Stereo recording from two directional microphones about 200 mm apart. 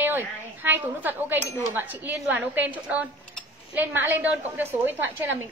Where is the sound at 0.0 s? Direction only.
10° right (ahead or behind).